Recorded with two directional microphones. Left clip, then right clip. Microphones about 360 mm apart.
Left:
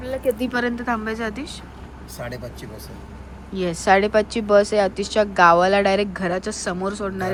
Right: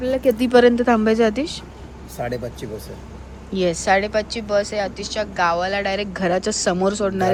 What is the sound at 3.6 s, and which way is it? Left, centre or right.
A woman's voice, centre.